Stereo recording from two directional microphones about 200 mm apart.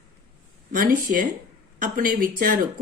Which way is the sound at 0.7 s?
45° right (ahead or behind).